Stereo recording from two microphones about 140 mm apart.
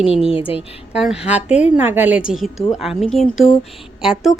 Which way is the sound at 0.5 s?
5° right (ahead or behind).